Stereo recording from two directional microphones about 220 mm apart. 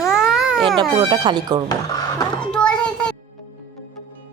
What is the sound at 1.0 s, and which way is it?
Speech, 20° right (ahead or behind).